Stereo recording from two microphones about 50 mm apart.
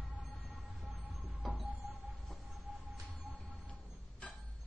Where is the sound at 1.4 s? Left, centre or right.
Centre.